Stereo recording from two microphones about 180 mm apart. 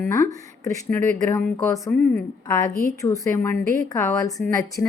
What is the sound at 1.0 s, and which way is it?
Speech, 45° right (ahead or behind).